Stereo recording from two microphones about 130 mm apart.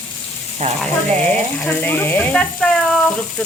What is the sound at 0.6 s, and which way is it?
Speech, 60° right (ahead or behind).